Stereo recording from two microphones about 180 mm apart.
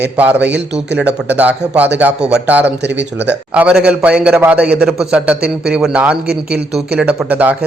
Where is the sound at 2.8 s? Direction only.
70° right (ahead or behind).